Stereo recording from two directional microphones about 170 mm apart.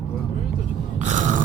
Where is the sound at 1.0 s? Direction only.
45° right (ahead or behind).